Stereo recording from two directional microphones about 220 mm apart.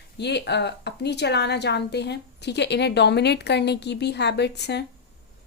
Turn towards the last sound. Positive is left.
turn(degrees=50)  # may be behind; listen again after turning